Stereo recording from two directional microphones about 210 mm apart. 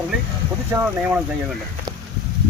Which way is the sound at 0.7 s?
5° right (ahead or behind).